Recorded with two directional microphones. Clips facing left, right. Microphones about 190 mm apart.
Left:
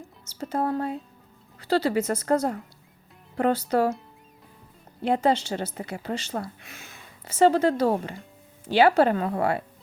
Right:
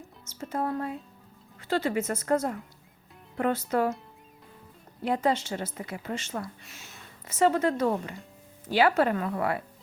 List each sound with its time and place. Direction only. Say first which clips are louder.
0.3 s a woman's voice: left 4 dB; 35° left (ahead or behind)
5.0 s a woman's voice: left 4 dB; 30° left (ahead or behind)
6.6 s speech: left 3 dB; 55° left (ahead or behind)
7.3 s a woman's voice: left 4 dB; 30° left (ahead or behind)